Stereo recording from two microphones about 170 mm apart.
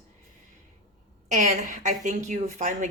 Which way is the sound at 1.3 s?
45° right (ahead or behind).